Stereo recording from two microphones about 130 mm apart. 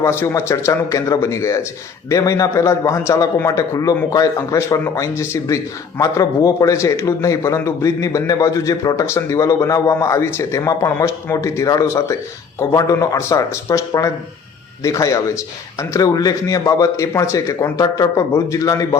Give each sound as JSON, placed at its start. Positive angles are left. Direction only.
{"t": 0.0, "sound": "a man's voice", "side_deg": 20}